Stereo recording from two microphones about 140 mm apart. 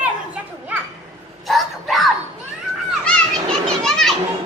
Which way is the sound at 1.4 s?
Centre (ahead or behind).